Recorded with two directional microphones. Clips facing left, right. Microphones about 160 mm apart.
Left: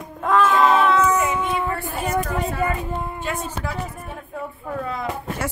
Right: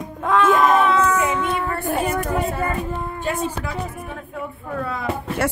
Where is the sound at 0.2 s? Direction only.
Centre (ahead or behind).